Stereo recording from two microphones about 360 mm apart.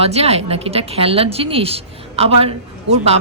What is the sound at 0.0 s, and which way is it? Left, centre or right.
Speech, centre.